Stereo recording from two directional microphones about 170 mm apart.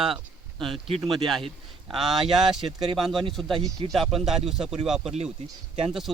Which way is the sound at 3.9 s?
Centre (ahead or behind).